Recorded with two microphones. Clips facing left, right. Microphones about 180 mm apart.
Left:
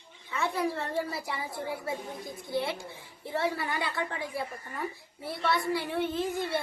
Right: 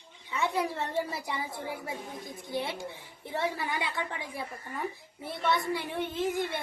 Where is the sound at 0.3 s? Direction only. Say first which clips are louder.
Even; 20° right (ahead or behind).